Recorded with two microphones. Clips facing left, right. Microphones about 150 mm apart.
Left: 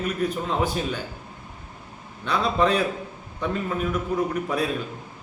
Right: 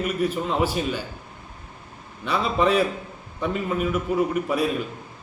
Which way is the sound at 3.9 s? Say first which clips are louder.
Right 3 dB; 10° right (ahead or behind).